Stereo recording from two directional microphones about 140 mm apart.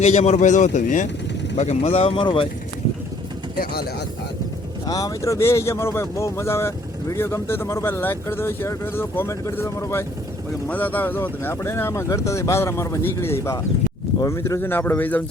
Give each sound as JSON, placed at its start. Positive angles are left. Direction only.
{"t": 0.0, "sound": "speech", "side_deg": 50}
{"t": 1.5, "sound": "speech", "side_deg": 50}
{"t": 3.6, "sound": "speech", "side_deg": 90}
{"t": 4.9, "sound": "speech", "side_deg": 25}